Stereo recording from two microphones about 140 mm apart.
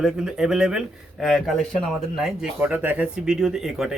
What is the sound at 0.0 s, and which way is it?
Speech, 5° right (ahead or behind).